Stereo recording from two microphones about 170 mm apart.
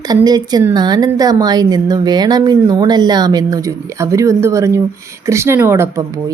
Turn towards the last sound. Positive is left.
turn(degrees=-15)  # may be behind; listen again after turning